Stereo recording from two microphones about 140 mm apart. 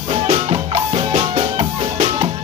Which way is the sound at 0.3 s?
40° right (ahead or behind).